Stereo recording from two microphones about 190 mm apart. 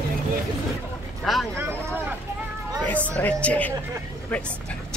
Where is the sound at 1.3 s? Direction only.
Centre (ahead or behind).